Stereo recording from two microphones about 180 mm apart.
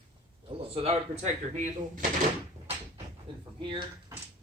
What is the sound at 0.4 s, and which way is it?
Speech, 35° right (ahead or behind).